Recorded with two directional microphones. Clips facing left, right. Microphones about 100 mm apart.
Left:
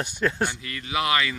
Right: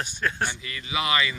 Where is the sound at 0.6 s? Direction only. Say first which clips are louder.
Left 2 dB; 55° left (ahead or behind).